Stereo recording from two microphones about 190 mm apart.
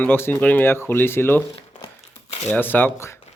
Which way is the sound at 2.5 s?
10° left (ahead or behind).